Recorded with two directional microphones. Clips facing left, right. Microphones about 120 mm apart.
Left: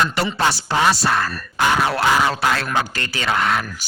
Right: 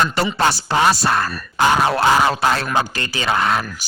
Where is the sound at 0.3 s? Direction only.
45° right (ahead or behind).